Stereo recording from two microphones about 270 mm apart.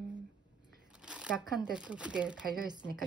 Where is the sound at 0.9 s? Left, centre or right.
Centre.